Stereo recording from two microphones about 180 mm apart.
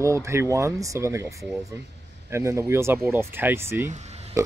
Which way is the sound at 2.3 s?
15° right (ahead or behind).